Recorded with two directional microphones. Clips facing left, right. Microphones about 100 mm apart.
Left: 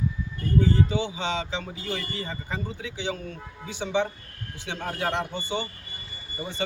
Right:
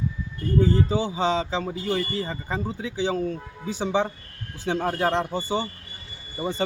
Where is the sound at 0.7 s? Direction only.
40° right (ahead or behind).